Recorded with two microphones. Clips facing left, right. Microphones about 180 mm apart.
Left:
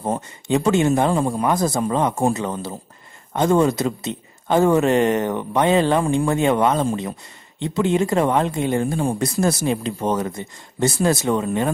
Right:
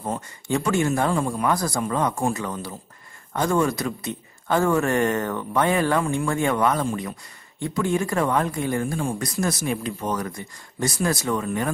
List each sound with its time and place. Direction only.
0.5 s speech: 20° left (ahead or behind)